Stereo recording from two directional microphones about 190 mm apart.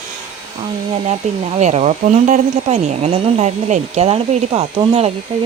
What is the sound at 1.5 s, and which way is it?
Speech, 35° right (ahead or behind).